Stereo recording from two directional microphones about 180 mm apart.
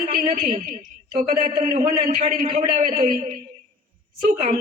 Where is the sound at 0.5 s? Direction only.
45° right (ahead or behind).